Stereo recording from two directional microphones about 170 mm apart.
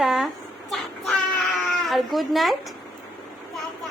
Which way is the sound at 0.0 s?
Centre (ahead or behind).